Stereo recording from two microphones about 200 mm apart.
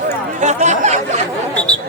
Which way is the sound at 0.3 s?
35° right (ahead or behind).